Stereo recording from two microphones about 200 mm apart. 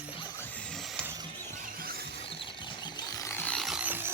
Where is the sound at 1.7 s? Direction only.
50° right (ahead or behind).